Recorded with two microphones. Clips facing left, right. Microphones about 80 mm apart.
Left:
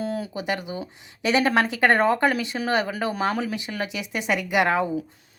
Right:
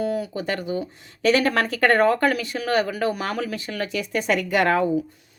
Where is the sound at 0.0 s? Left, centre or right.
Left.